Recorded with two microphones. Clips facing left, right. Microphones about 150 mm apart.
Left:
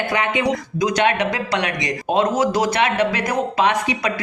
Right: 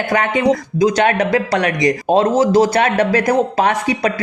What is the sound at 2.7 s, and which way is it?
Speech, 40° right (ahead or behind).